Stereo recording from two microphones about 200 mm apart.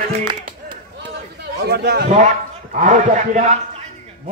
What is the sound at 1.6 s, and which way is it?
Speech, 55° right (ahead or behind).